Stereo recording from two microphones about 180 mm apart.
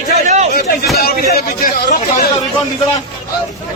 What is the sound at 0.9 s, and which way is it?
Speech, 60° left (ahead or behind).